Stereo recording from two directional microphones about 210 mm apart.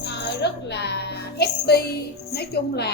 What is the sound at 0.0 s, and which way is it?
Music, 55° left (ahead or behind).